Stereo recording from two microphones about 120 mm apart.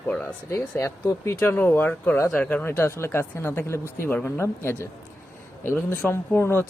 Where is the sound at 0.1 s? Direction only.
10° left (ahead or behind).